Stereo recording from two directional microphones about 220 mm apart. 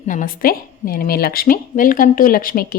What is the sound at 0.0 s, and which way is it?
A woman's voice, 35° left (ahead or behind).